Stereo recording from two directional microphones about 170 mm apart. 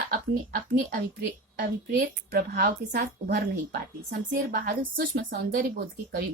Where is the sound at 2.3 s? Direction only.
65° right (ahead or behind).